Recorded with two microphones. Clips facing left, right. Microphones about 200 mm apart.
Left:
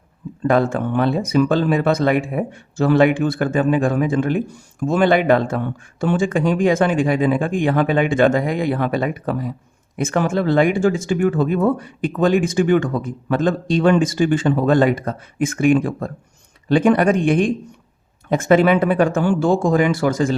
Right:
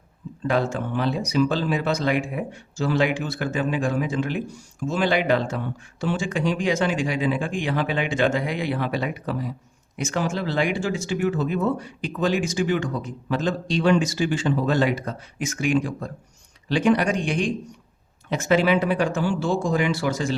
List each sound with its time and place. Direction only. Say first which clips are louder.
0.4 s speech: left 6 dB; 55° left (ahead or behind)